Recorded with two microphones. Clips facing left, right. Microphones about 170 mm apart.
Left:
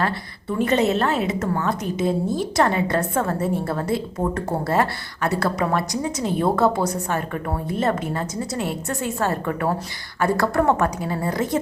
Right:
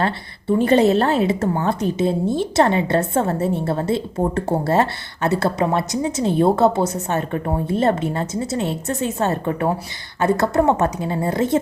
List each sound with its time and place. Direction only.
0.0 s a woman's voice: 30° right (ahead or behind)